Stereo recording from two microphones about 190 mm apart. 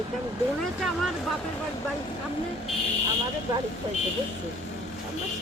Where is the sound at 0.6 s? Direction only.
Centre (ahead or behind).